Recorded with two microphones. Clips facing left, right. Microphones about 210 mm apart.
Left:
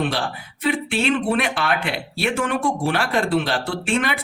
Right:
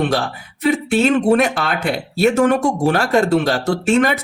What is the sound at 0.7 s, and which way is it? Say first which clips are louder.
Speech: right 6 dB; 45° right (ahead or behind).